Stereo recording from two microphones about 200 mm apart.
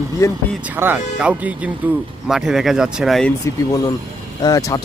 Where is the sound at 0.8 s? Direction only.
10° right (ahead or behind).